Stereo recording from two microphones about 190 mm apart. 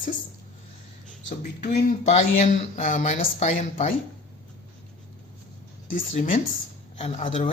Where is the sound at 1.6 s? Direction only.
40° left (ahead or behind).